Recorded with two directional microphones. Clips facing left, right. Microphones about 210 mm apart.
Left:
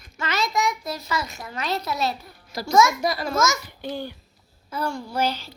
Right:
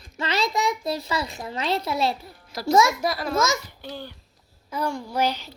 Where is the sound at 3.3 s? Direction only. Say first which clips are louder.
Right 1 dB; 30° right (ahead or behind).